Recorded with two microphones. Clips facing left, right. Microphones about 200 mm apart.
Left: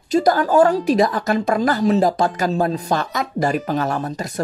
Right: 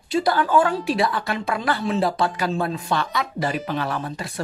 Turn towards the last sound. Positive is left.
turn(degrees=40)  # may be behind; listen again after turning